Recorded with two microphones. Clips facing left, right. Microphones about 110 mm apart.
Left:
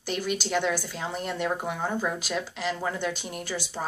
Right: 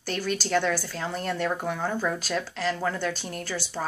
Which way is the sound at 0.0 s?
15° left (ahead or behind).